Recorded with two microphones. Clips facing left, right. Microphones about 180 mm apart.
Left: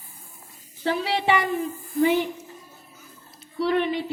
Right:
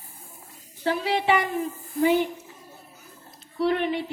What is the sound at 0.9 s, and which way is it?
Speech, 50° right (ahead or behind).